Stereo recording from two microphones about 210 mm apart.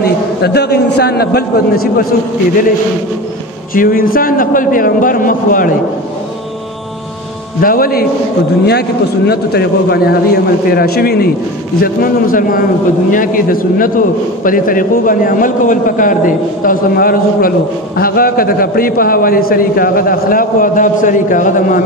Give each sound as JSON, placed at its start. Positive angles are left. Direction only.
{"t": 0.0, "sound": "a man's voice", "side_deg": 50}
{"t": 3.7, "sound": "a man's voice", "side_deg": 45}
{"t": 7.6, "sound": "a man's voice", "side_deg": 45}